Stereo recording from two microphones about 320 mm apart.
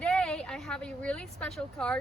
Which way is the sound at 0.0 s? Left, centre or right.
Centre.